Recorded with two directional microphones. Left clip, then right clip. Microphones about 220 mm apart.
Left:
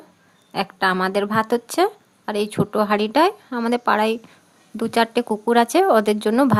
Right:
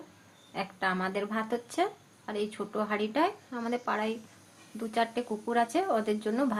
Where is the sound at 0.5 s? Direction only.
55° left (ahead or behind).